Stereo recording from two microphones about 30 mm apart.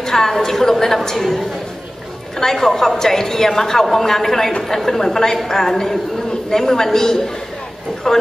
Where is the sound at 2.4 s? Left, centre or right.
Centre.